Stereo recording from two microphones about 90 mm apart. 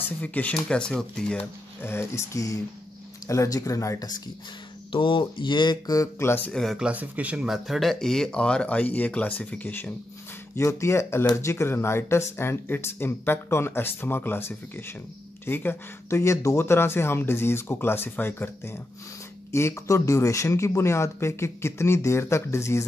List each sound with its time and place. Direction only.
0.2 s speech: 15° left (ahead or behind)
1.8 s speech: 30° left (ahead or behind)
4.9 s speech: 70° left (ahead or behind); by 6.0 s 50° left (ahead or behind)
6.1 s speech: 25° left (ahead or behind)
6.5 s speech: 5° left (ahead or behind)
6.8 s speech: 15° right (ahead or behind)
7.4 s speech: 5° right (ahead or behind); by 9.9 s 20° left (ahead or behind)
10.5 s speech: 30° left (ahead or behind)
16.2 s speech: 35° left (ahead or behind)